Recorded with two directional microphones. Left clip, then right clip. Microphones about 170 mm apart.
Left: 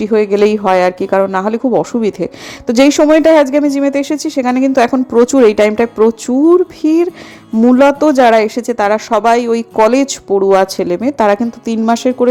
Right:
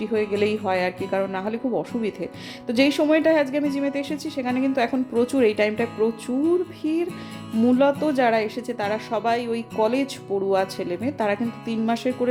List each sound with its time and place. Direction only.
0.0 s speech: 50° left (ahead or behind)
7.6 s speech: 35° left (ahead or behind)
7.9 s speech: 50° left (ahead or behind)